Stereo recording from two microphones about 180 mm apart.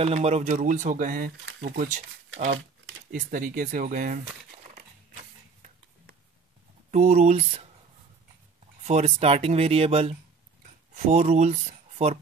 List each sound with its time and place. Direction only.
0.0 s speech: 35° right (ahead or behind); by 1.9 s 65° right (ahead or behind)
3.1 s speech: 50° right (ahead or behind)
4.6 s a sound: 40° right (ahead or behind)
6.9 s speech: 40° right (ahead or behind)
8.8 s speech: 35° right (ahead or behind)